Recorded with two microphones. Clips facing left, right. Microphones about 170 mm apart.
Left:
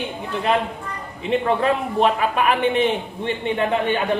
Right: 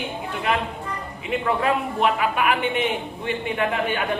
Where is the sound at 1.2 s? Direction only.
30° left (ahead or behind).